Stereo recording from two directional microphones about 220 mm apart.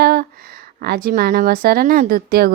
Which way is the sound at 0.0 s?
45° right (ahead or behind).